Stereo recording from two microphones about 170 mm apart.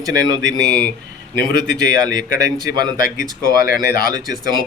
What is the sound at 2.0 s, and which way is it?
Speech, 25° right (ahead or behind).